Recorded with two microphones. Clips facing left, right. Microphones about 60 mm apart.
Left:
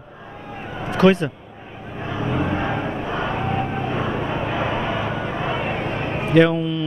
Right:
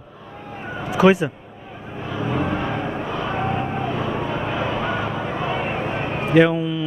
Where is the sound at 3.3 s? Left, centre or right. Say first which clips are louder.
Even; centre.